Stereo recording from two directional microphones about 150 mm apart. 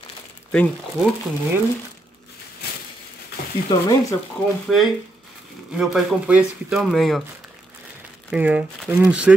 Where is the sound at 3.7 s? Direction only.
25° left (ahead or behind).